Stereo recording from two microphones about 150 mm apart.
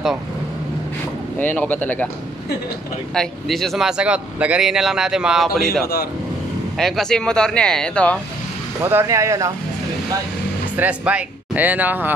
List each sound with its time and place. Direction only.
1.4 s speech: 10° left (ahead or behind)
3.2 s speech: centre (ahead or behind)
6.8 s speech: 5° left (ahead or behind)
8.8 s speech: 20° right (ahead or behind)
10.8 s speech: 10° right (ahead or behind)